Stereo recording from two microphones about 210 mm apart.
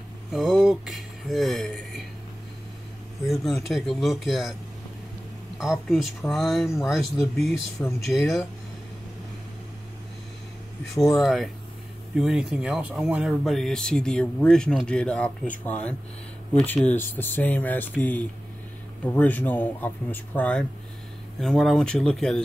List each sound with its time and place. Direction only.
0.3 s speech: centre (ahead or behind)
3.6 s speech: centre (ahead or behind)
5.6 s speech: centre (ahead or behind)
11.1 s speech: centre (ahead or behind)